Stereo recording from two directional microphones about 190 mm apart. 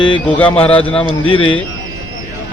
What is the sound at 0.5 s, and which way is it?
A man's voice, 30° left (ahead or behind).